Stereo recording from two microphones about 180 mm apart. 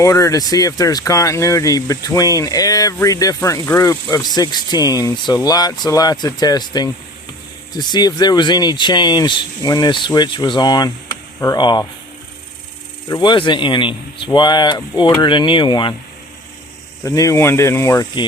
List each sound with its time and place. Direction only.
0.0 s speech: 20° left (ahead or behind)
13.1 s speech: 25° left (ahead or behind)
17.0 s speech: 15° left (ahead or behind)